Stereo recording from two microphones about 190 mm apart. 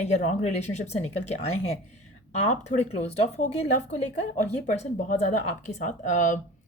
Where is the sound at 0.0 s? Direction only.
40° left (ahead or behind).